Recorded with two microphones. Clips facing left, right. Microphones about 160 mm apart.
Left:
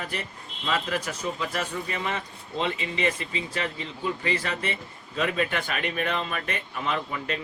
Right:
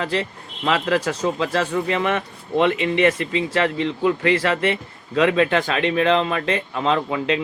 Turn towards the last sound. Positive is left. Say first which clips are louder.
# right 9 dB
turn(degrees=-80)